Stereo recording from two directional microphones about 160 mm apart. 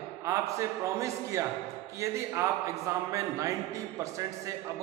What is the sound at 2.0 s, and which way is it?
A man's voice, 20° right (ahead or behind).